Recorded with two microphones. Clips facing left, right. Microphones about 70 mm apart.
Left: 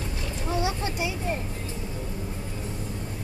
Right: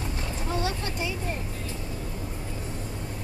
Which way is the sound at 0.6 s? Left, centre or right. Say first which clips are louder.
Left 2 dB; centre.